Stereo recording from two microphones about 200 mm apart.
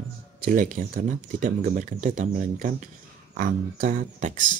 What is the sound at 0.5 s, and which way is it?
Speech, 40° right (ahead or behind).